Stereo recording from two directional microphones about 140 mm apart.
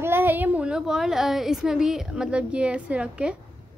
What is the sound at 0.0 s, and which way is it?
Speech, 15° right (ahead or behind).